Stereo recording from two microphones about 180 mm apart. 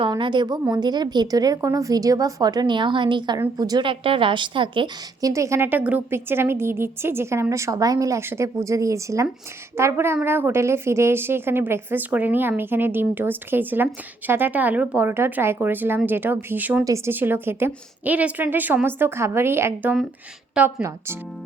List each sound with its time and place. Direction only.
0.0 s a woman's voice: 25° right (ahead or behind)
5.3 s a woman's voice: 15° right (ahead or behind)